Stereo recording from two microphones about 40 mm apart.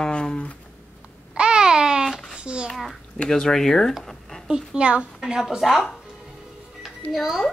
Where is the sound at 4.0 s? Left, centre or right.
Centre.